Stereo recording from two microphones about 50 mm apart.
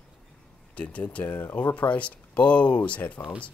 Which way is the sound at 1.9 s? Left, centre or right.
Left.